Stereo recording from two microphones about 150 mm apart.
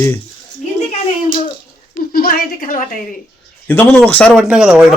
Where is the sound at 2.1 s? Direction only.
75° left (ahead or behind).